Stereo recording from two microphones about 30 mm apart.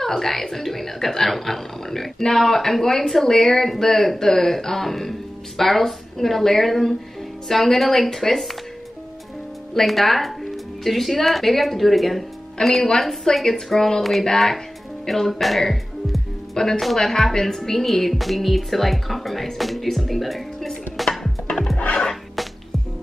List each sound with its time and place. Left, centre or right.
0.0 s speech: centre
9.8 s speech: centre
12.6 s a woman's voice: left
13.2 s speech: centre
15.6 s music: centre
16.5 s speech: centre
16.8 s speech: centre
17.1 s speech: centre
20.9 s chopping: centre
21.7 s music: left